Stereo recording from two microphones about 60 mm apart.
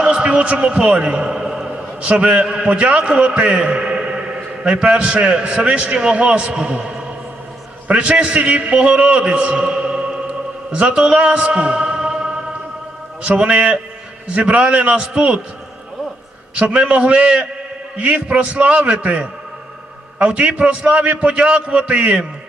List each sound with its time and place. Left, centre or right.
0.0 s a man's voice: centre
7.9 s a man's voice: centre
16.6 s a man's voice: centre